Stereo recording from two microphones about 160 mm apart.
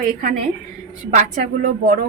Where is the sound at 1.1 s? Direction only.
60° right (ahead or behind).